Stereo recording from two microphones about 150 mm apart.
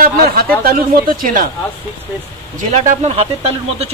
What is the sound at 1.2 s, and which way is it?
Speech, 70° right (ahead or behind).